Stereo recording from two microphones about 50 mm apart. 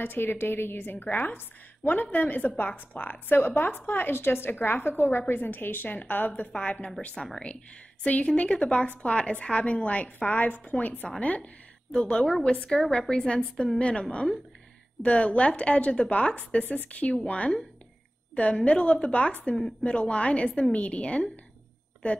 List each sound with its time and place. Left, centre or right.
0.0 s a woman's voice: left
6.5 s a woman's voice: left
7.2 s a woman's voice: centre
8.0 s a woman's voice: left